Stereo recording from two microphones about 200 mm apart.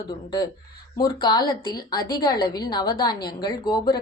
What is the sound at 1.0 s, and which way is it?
A woman's voice, 20° left (ahead or behind).